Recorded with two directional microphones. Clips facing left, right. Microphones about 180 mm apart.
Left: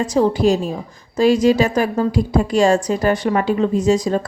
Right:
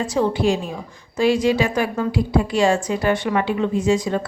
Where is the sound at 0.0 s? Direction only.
40° left (ahead or behind).